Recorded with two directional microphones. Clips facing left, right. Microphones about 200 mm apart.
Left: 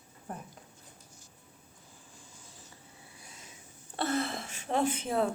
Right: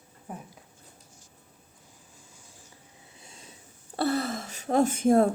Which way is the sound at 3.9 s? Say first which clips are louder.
Right 4 dB; 40° right (ahead or behind).